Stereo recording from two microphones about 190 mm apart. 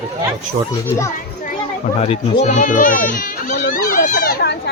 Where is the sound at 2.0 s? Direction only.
35° left (ahead or behind).